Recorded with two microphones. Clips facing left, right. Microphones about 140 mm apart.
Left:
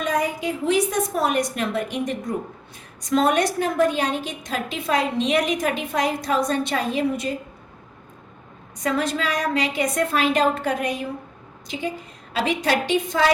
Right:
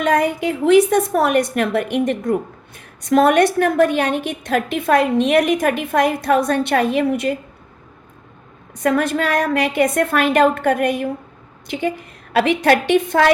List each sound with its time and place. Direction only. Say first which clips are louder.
0.0 s a woman's voice: right 6 dB; 65° right (ahead or behind)
8.8 s a woman's voice: right 6 dB; 55° right (ahead or behind)